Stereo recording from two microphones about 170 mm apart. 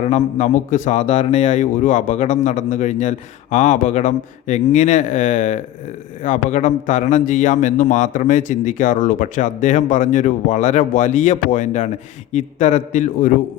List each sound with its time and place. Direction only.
0.0 s a man's voice: 45° left (ahead or behind)